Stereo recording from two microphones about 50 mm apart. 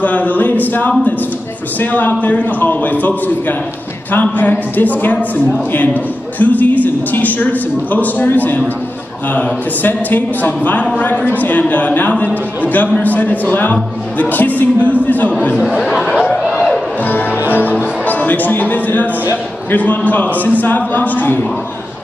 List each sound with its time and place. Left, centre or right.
0.0 s a sound: left
1.8 s a man's voice: left
15.8 s speech: centre
17.0 s music: left
17.5 s a man's voice: left